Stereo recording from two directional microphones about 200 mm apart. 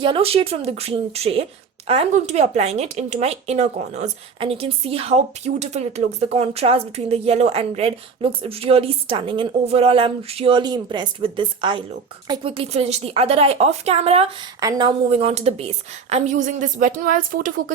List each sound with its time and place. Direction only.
0.0 s speech: 25° right (ahead or behind)
14.6 s speech: 20° right (ahead or behind); by 17.7 s 40° right (ahead or behind)